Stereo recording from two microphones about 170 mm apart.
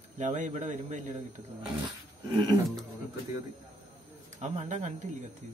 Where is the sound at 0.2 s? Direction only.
45° right (ahead or behind).